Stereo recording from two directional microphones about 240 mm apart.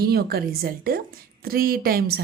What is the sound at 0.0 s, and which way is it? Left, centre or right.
A woman's voice, right.